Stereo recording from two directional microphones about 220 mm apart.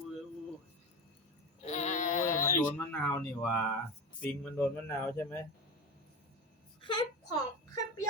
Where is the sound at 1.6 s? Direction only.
30° left (ahead or behind).